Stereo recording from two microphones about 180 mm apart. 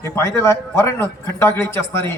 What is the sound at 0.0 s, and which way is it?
A man's voice, 15° left (ahead or behind).